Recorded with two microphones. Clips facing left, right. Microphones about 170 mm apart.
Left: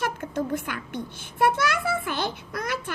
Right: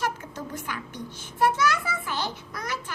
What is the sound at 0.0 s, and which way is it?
A child's voice, 55° left (ahead or behind).